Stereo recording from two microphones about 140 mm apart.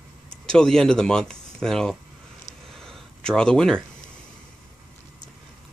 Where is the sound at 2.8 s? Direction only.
5° left (ahead or behind).